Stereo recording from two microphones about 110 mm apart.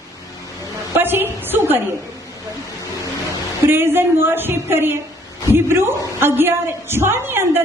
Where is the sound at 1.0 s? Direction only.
20° right (ahead or behind).